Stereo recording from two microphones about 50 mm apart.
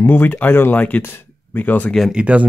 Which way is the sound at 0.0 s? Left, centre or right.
Left.